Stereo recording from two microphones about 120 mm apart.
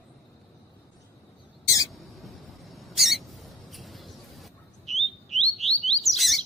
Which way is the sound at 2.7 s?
Centre (ahead or behind).